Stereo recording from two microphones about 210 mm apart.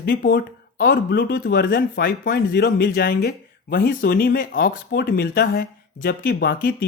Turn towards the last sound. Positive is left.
turn(degrees=40)  # may be behind; listen again after turning